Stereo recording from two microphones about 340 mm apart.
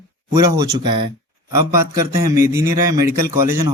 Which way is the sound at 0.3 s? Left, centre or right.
Centre.